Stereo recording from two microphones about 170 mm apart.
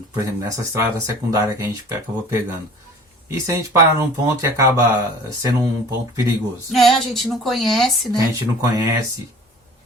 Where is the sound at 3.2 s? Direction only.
15° right (ahead or behind).